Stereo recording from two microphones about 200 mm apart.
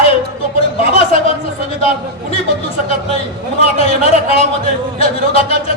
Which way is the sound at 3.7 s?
30° left (ahead or behind).